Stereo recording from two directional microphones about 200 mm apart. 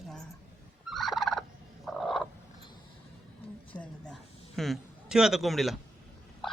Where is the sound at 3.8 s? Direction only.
5° left (ahead or behind).